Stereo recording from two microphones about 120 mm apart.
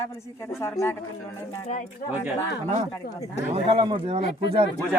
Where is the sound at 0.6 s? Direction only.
20° left (ahead or behind).